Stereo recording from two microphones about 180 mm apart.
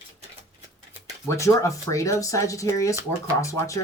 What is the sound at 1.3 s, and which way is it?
Speech, 15° left (ahead or behind).